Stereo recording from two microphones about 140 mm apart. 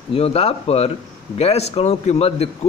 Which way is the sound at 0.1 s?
45° left (ahead or behind).